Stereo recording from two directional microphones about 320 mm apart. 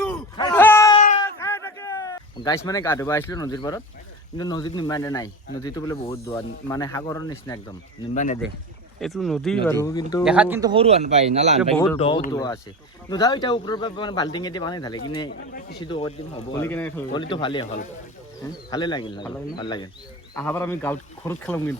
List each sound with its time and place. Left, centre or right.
0.0 s a sound: centre
4.4 s speech: centre
8.1 s speech: left
9.0 s speech: centre
10.2 s speech: centre
11.9 s speech: centre
15.3 s speech: left
15.8 s speech: centre